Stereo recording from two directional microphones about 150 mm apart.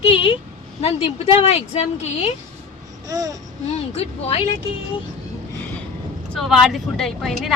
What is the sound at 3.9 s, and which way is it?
Speech, 45° left (ahead or behind).